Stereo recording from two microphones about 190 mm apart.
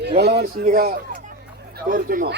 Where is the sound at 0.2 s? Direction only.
60° right (ahead or behind).